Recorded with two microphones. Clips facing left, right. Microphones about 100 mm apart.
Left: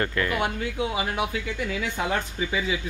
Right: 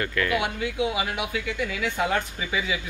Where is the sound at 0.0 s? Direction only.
30° left (ahead or behind).